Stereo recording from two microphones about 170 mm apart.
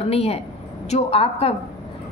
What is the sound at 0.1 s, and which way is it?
A woman's voice, 35° left (ahead or behind).